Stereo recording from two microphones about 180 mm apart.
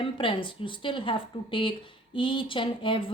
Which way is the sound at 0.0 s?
30° left (ahead or behind).